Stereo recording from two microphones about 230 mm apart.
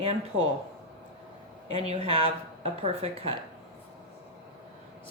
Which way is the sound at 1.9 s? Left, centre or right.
Right.